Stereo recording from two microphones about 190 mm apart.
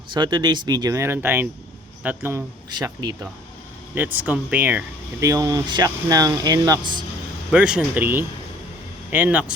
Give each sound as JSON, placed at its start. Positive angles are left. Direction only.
{"t": 0.1, "sound": "speech", "side_deg": -25}
{"t": 7.5, "sound": "speech", "side_deg": -5}